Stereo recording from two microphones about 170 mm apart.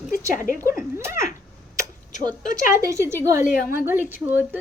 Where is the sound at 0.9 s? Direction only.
15° right (ahead or behind).